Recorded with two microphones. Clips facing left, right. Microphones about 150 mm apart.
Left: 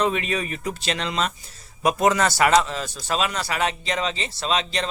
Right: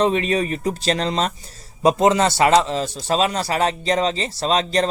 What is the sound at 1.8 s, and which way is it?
Speech, 25° right (ahead or behind).